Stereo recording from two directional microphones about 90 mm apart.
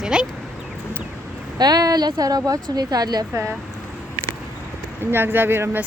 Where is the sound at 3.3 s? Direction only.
30° right (ahead or behind).